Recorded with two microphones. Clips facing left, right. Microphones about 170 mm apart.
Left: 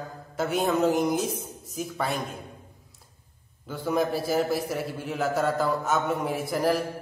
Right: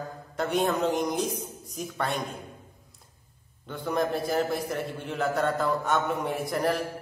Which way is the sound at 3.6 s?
Centre (ahead or behind).